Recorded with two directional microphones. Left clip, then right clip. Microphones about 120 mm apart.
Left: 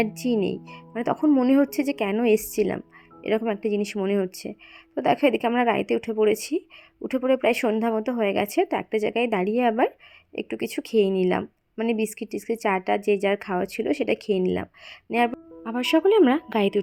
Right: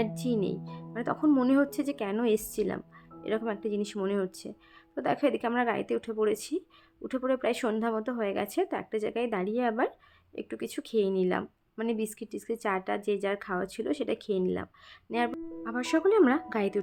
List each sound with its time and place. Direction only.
0.0 s speech: 40° left (ahead or behind)